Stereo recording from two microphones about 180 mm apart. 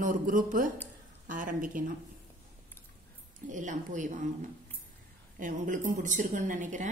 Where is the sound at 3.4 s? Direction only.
45° right (ahead or behind).